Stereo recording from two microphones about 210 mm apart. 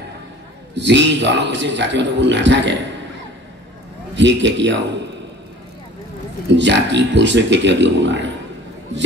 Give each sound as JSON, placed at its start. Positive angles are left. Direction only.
{"t": 0.7, "sound": "a man's voice", "side_deg": -55}
{"t": 4.1, "sound": "a man's voice", "side_deg": -60}
{"t": 6.5, "sound": "a man's voice", "side_deg": -55}